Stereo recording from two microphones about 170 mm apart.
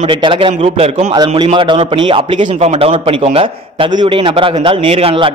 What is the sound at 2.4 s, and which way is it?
A man's voice, 40° right (ahead or behind).